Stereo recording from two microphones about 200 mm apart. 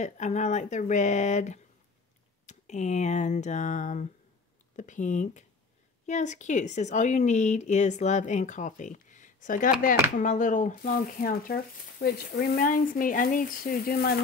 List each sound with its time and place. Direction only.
0.0 s a woman's voice: 35° left (ahead or behind)